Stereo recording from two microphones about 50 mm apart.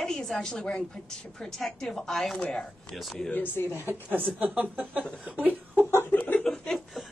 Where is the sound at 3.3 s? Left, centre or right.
Left.